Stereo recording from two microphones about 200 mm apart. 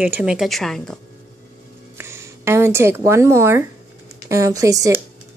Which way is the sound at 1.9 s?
15° right (ahead or behind).